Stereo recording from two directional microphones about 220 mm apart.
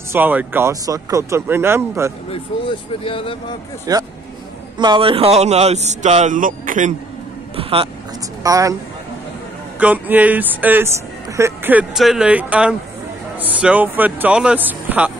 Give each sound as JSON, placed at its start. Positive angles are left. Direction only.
{"t": 0.1, "sound": "speech", "side_deg": -10}
{"t": 2.9, "sound": "speech", "side_deg": 25}
{"t": 3.9, "sound": "speech", "side_deg": -15}
{"t": 7.5, "sound": "speech", "side_deg": -25}
{"t": 8.5, "sound": "speech", "side_deg": -15}
{"t": 9.8, "sound": "speech", "side_deg": -5}